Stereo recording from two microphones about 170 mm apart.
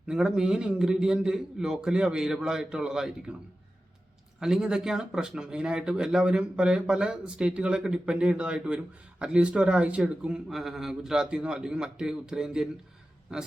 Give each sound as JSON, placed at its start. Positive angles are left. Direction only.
{"t": 0.1, "sound": "speech", "side_deg": -5}
{"t": 4.4, "sound": "speech", "side_deg": -5}